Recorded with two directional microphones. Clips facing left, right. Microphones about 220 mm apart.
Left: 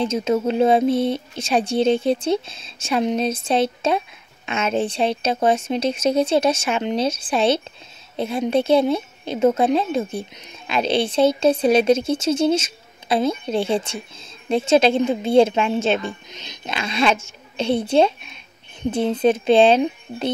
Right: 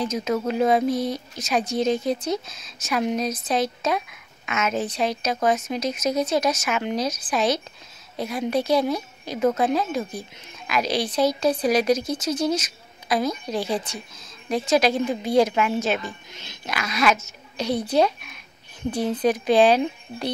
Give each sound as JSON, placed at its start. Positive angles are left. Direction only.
{"t": 0.0, "sound": "speech", "side_deg": 25}